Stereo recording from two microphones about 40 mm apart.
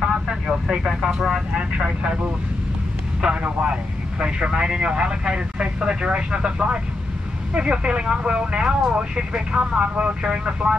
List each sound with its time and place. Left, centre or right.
0.0 s vehicle: centre
3.2 s speech: centre